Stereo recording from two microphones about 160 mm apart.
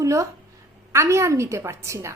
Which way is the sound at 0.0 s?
20° right (ahead or behind).